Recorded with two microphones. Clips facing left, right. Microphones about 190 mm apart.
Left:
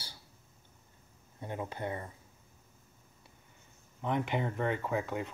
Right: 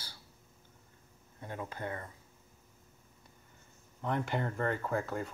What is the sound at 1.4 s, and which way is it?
Speech, 20° left (ahead or behind).